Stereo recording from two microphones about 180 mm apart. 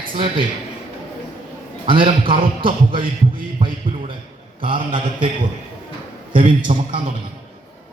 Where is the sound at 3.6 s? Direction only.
25° right (ahead or behind).